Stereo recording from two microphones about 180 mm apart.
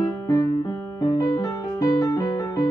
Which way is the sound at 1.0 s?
20° left (ahead or behind).